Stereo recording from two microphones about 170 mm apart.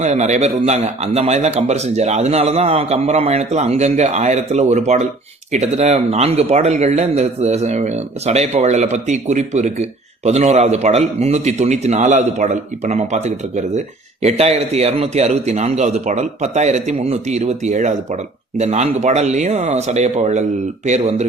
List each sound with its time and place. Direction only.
0.0 s a man's voice: 45° right (ahead or behind)